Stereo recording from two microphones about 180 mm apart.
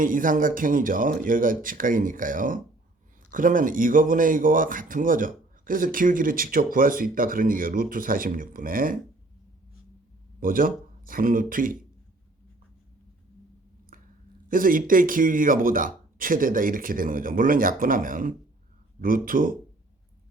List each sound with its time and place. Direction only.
0.0 s speech: 50° right (ahead or behind)
10.4 s speech: 50° right (ahead or behind)
13.9 s a sound: 50° right (ahead or behind)
14.5 s speech: 50° right (ahead or behind)